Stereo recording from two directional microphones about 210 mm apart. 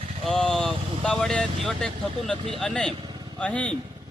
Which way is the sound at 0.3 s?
5° left (ahead or behind).